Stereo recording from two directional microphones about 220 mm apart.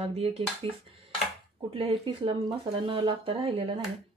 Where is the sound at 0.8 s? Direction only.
25° right (ahead or behind).